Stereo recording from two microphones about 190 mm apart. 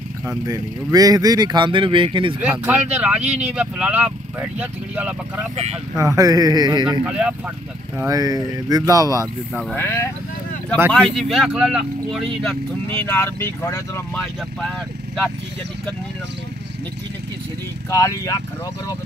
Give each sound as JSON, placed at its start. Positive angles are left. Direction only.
{"t": 0.5, "sound": "speech", "side_deg": -20}
{"t": 2.4, "sound": "speech", "side_deg": -10}
{"t": 5.9, "sound": "speech", "side_deg": -20}
{"t": 7.1, "sound": "speech", "side_deg": -5}
{"t": 8.0, "sound": "speech", "side_deg": -20}
{"t": 9.6, "sound": "speech", "side_deg": 5}
{"t": 11.1, "sound": "speech", "side_deg": 0}
{"t": 17.8, "sound": "speech", "side_deg": 15}